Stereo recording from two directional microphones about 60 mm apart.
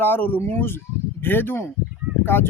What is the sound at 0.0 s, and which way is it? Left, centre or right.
Speech, left.